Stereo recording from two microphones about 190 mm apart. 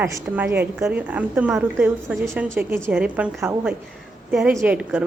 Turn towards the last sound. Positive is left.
turn(degrees=-10)  # may be behind; listen again after turning